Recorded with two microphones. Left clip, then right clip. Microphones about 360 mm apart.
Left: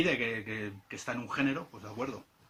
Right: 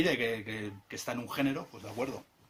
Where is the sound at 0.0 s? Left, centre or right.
Centre.